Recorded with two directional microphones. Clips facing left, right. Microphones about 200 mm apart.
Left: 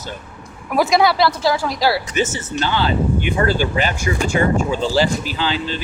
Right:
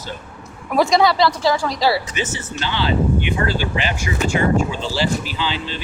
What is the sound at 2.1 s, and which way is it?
Speech, 45° left (ahead or behind).